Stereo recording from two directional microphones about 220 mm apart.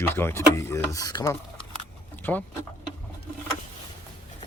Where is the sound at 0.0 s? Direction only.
10° left (ahead or behind).